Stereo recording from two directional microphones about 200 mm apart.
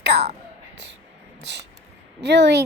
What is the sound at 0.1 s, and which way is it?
Speech, 30° right (ahead or behind).